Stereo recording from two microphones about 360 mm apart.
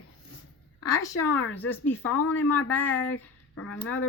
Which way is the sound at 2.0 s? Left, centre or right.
Left.